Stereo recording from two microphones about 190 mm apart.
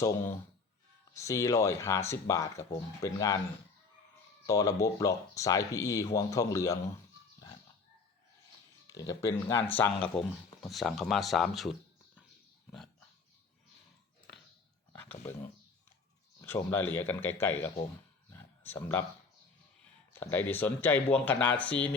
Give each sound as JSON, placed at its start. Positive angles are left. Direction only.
{"t": 0.0, "sound": "speech", "side_deg": 15}
{"t": 4.4, "sound": "speech", "side_deg": 15}
{"t": 8.9, "sound": "speech", "side_deg": 20}
{"t": 16.4, "sound": "speech", "side_deg": 10}
{"t": 18.3, "sound": "a sound", "side_deg": 10}
{"t": 20.1, "sound": "speech", "side_deg": 10}